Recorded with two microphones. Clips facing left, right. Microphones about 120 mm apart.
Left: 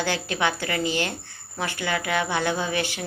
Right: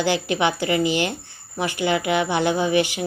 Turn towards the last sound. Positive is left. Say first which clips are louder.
# right 7 dB
turn(degrees=-15)  # may be behind; listen again after turning